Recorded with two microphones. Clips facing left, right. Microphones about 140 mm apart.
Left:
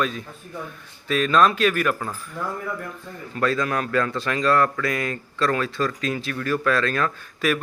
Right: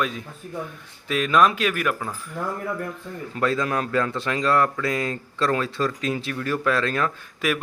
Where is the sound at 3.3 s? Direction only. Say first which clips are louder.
Even; 20° right (ahead or behind).